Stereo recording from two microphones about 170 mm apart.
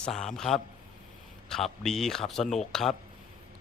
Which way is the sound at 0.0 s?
5° left (ahead or behind).